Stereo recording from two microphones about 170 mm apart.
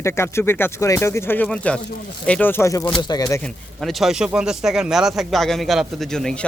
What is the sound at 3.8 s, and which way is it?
Speech, centre (ahead or behind).